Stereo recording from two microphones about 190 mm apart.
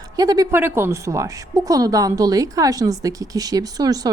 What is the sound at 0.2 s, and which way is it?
A woman's voice, 20° right (ahead or behind).